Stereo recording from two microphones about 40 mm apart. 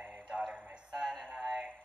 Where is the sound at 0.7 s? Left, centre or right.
Centre.